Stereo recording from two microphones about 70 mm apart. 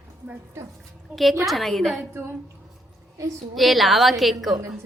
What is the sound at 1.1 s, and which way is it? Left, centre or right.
Speech, centre.